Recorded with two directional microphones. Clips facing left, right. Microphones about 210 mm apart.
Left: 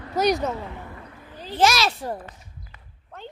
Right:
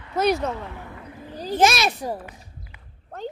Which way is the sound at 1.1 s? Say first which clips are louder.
Right 6 dB; 25° right (ahead or behind).